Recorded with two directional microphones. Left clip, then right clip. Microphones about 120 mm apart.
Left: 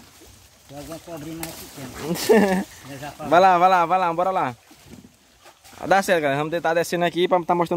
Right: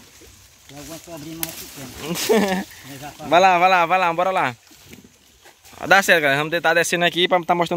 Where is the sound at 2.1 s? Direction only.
30° left (ahead or behind).